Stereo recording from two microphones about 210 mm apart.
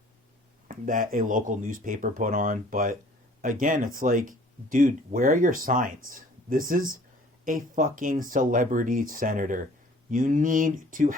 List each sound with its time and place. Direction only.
0.7 s speech: 40° right (ahead or behind)